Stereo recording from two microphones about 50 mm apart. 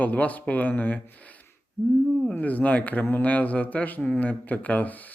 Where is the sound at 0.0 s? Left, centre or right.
Left.